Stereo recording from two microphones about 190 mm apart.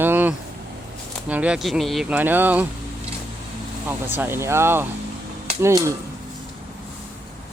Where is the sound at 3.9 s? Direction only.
10° right (ahead or behind).